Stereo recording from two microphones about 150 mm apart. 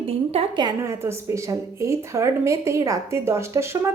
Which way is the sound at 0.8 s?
20° right (ahead or behind).